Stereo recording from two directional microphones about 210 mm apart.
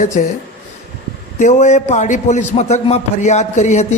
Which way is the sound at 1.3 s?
35° left (ahead or behind).